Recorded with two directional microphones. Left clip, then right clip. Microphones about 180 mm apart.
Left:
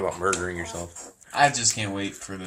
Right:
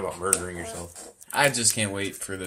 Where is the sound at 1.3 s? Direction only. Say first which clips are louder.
Left 2 dB; 55° right (ahead or behind).